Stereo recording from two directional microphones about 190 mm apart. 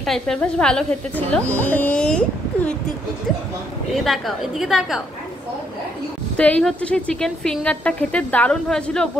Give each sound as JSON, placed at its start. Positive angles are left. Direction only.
{"t": 0.0, "sound": "a woman's voice", "side_deg": 0}
{"t": 3.9, "sound": "a woman's voice", "side_deg": 0}
{"t": 6.3, "sound": "a woman's voice", "side_deg": 5}